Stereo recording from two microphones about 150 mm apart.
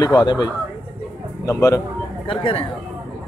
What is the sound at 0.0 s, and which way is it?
A man's voice, 25° left (ahead or behind).